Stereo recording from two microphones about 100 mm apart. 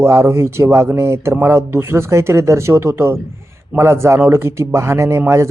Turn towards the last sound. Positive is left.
turn(degrees=-25)  # may be behind; listen again after turning